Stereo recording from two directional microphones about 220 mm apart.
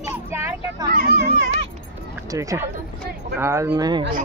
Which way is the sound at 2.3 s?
15° right (ahead or behind).